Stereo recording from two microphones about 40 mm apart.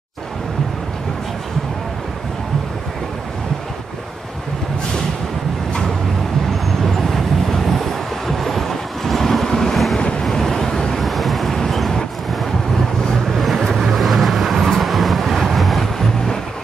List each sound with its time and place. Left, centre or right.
6.6 s vehicle: centre
9.9 s vehicle: left
10.2 s vehicle: centre
11.1 s vehicle: centre
13.3 s vehicle: centre